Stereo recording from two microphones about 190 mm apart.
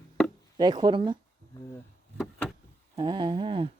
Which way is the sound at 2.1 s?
Centre (ahead or behind).